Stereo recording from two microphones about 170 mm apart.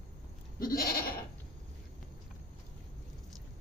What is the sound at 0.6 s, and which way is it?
Goat, 60° left (ahead or behind).